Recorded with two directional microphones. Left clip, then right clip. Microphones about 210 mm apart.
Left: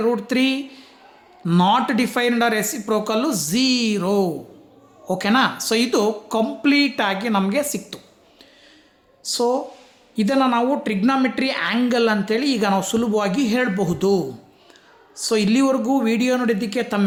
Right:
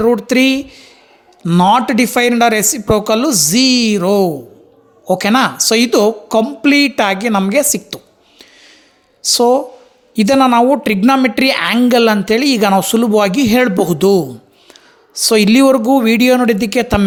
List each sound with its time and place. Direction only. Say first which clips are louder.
0.0 s a woman's voice: right 8 dB; 35° right (ahead or behind)